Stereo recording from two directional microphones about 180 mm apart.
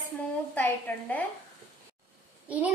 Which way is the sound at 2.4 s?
10° right (ahead or behind).